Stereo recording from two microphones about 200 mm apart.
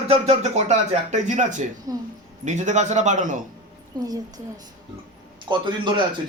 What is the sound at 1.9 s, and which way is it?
Speech, 20° right (ahead or behind).